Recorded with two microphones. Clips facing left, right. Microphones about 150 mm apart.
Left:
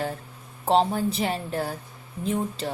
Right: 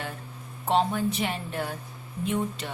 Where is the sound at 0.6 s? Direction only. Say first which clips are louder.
Left 3 dB; 35° left (ahead or behind).